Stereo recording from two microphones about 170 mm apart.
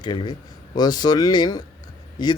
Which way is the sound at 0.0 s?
25° left (ahead or behind).